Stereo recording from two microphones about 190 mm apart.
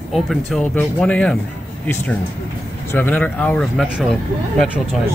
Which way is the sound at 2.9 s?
10° left (ahead or behind).